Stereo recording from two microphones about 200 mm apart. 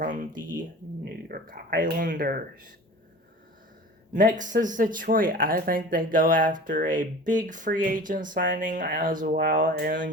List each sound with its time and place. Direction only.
0.0 s speech: 40° right (ahead or behind)
4.1 s speech: 40° right (ahead or behind)